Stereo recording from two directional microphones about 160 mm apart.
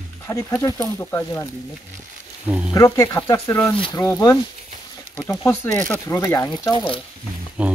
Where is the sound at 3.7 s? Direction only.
35° left (ahead or behind).